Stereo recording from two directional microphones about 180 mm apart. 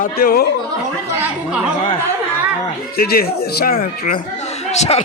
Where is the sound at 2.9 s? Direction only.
55° left (ahead or behind).